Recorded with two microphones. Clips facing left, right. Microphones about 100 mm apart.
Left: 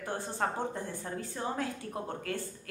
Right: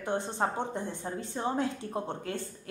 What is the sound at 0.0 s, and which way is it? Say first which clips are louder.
A woman's voice: right 3 dB; 20° right (ahead or behind).